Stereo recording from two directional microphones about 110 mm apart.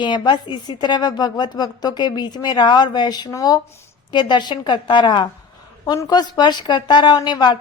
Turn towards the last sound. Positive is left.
turn(degrees=40)  # may be behind; listen again after turning